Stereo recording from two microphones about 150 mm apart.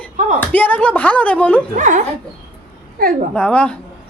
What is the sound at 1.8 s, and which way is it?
Speech, 60° right (ahead or behind).